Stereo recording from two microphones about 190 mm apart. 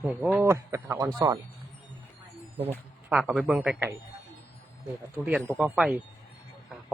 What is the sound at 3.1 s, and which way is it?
Speech, 5° right (ahead or behind).